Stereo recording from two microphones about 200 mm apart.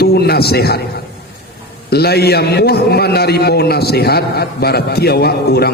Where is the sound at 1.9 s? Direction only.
50° left (ahead or behind).